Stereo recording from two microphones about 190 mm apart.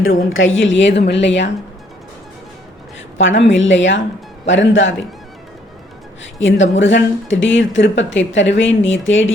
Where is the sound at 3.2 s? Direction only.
80° left.